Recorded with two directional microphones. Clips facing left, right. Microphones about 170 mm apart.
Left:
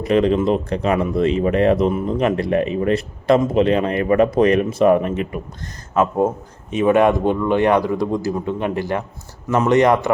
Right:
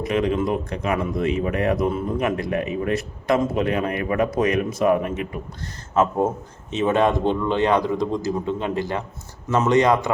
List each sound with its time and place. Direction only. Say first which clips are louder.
0.0 s speech: left 5 dB; 35° left (ahead or behind)
6.1 s speech: left 3 dB; 10° left (ahead or behind)
8.7 s a man's voice: left 3 dB; 20° right (ahead or behind)
9.5 s speech: left 3 dB; 15° left (ahead or behind)